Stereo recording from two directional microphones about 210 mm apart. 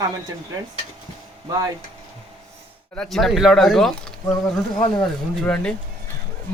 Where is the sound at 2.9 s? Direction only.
Centre (ahead or behind).